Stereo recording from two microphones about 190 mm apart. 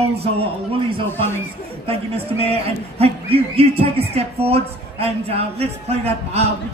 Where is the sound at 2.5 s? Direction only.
30° right (ahead or behind).